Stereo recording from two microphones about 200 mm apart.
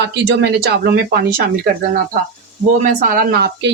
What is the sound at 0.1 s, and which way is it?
Speech, 60° right (ahead or behind).